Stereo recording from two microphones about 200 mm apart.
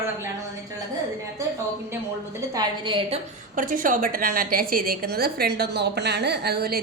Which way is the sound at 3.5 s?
40° right (ahead or behind).